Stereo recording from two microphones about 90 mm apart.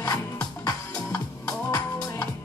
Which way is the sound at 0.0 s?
45° left (ahead or behind).